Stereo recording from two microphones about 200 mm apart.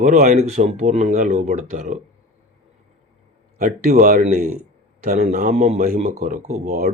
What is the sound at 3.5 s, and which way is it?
Speech, 40° right (ahead or behind).